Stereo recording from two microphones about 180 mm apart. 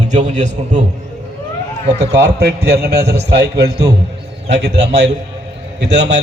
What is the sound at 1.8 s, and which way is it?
Speech, 40° right (ahead or behind).